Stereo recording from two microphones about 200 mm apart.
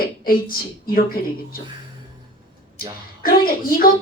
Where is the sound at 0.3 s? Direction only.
45° left (ahead or behind).